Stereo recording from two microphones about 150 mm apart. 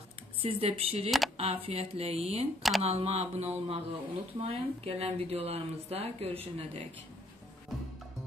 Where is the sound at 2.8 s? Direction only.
45° right (ahead or behind).